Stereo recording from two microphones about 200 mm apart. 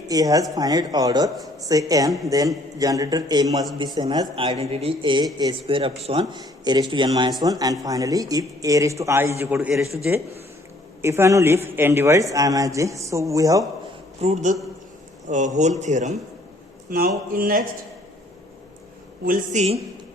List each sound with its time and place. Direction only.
0.1 s speech: 20° right (ahead or behind)
11.0 s speech: 15° right (ahead or behind)
14.2 s a man's voice: 35° right (ahead or behind)
16.9 s a man's voice: 45° right (ahead or behind)
19.2 s a man's voice: 40° right (ahead or behind)